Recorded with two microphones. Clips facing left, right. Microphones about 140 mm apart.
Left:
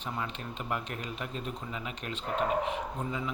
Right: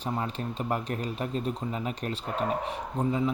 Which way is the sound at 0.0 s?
35° right (ahead or behind).